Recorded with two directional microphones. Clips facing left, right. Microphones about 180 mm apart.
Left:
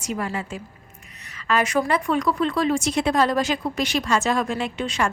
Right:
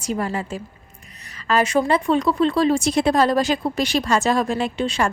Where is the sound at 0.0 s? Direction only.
35° right (ahead or behind).